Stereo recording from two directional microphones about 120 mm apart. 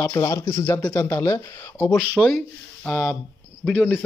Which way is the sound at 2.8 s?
10° left (ahead or behind).